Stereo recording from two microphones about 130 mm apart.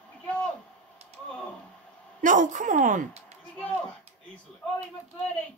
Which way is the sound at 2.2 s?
75° right (ahead or behind).